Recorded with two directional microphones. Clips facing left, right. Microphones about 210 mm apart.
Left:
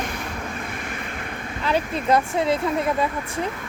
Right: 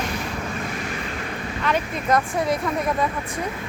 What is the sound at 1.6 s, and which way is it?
Speech, 30° left (ahead or behind).